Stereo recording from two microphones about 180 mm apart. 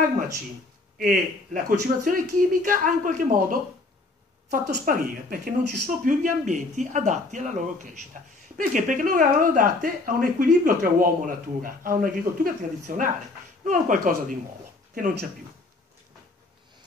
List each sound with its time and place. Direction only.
0.9 s speech: 55° right (ahead or behind)
4.6 s speech: 50° right (ahead or behind)